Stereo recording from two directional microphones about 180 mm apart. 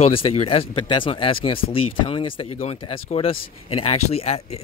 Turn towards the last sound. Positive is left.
turn(degrees=35)  # may be behind; listen again after turning